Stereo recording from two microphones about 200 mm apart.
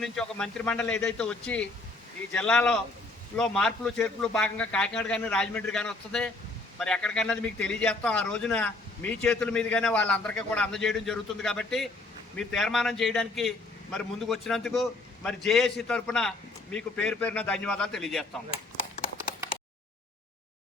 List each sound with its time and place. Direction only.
0.0 s a man's voice: 5° left (ahead or behind)
18.5 s clip-clop: 30° left (ahead or behind)